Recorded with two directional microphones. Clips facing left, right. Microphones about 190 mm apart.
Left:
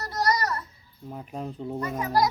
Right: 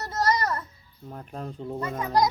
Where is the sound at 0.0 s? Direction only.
25° right (ahead or behind).